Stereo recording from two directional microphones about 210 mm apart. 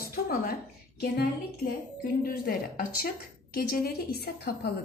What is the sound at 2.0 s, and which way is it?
A woman's voice, 45° left (ahead or behind).